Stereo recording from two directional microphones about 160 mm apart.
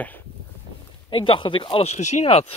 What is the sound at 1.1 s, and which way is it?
Speech, 30° left (ahead or behind).